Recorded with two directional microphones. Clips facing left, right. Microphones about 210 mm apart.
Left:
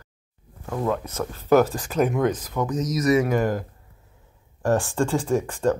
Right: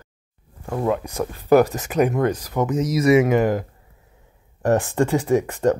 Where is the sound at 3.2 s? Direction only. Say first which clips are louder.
Right 4 dB; 15° right (ahead or behind).